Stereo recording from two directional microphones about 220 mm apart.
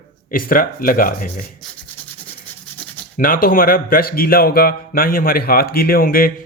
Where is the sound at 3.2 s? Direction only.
40° left (ahead or behind).